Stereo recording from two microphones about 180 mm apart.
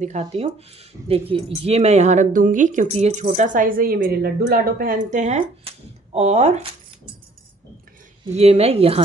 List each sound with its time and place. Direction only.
0.0 s speech: 40° right (ahead or behind)
8.4 s speech: 35° right (ahead or behind)